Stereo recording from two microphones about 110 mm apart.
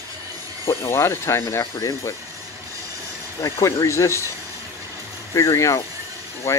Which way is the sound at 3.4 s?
30° left (ahead or behind).